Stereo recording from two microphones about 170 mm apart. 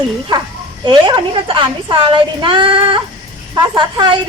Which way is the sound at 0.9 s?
30° right (ahead or behind).